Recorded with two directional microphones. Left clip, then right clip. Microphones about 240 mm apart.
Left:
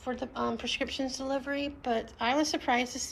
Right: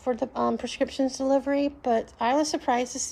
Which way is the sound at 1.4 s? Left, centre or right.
Right.